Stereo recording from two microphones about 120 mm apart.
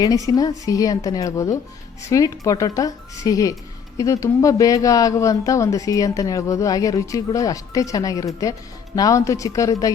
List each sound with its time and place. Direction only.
0.0 s speech: 30° left (ahead or behind)